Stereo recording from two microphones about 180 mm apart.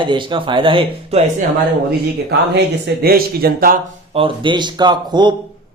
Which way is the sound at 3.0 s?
60° right (ahead or behind).